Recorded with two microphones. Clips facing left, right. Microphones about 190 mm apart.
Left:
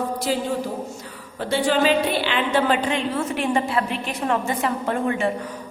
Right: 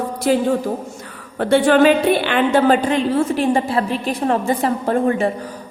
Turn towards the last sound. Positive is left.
turn(degrees=-35)  # may be behind; listen again after turning